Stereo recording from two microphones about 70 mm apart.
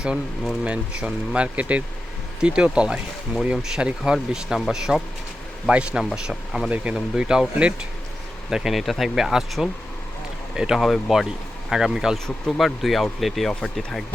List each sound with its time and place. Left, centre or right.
0.0 s speech: centre
8.4 s speech: centre
12.1 s speech: centre